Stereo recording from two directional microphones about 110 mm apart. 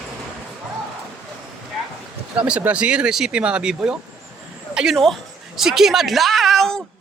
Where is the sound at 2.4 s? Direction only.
10° right (ahead or behind).